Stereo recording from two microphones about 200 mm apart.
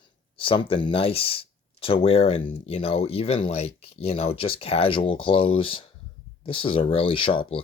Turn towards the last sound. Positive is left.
turn(degrees=25)  # may be behind; listen again after turning